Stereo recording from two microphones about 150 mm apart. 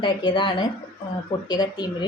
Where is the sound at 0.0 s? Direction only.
30° left (ahead or behind).